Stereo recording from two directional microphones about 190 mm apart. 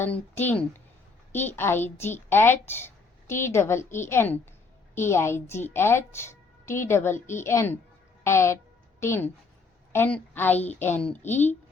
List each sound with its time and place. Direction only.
0.0 s a woman's voice: 10° left (ahead or behind)